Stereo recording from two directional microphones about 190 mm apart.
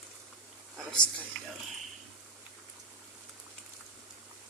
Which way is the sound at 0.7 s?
5° left (ahead or behind).